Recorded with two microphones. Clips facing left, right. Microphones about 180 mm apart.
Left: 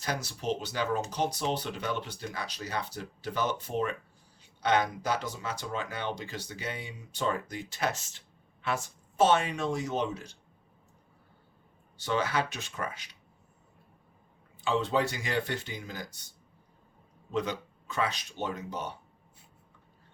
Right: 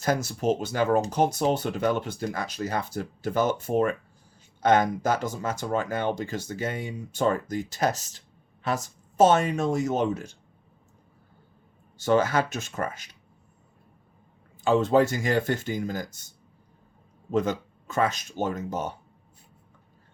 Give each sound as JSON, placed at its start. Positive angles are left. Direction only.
{"t": 0.0, "sound": "speech", "side_deg": -45}
{"t": 11.9, "sound": "speech", "side_deg": -45}
{"t": 14.6, "sound": "speech", "side_deg": -45}
{"t": 17.3, "sound": "speech", "side_deg": -45}